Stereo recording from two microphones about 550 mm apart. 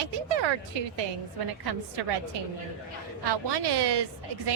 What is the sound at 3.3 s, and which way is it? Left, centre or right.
Speech, right.